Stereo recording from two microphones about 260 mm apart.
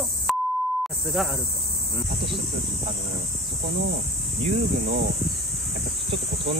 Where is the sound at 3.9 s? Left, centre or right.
Right.